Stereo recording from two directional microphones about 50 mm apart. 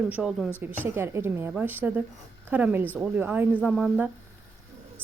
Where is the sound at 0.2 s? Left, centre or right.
Centre.